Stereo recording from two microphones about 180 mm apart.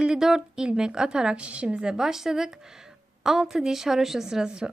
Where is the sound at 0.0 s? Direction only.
5° right (ahead or behind).